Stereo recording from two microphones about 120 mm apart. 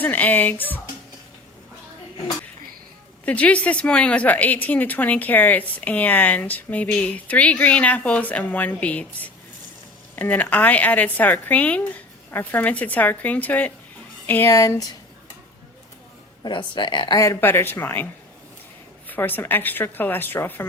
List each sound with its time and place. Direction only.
0.0 s a woman's voice: 15° left (ahead or behind)
3.2 s a woman's voice: 10° left (ahead or behind)
14.5 s speech: 25° left (ahead or behind)
16.4 s speech: 40° left (ahead or behind)
17.2 s a woman's voice: 20° left (ahead or behind)